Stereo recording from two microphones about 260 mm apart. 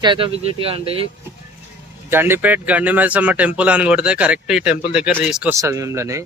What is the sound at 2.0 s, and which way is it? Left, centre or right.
Speech, centre.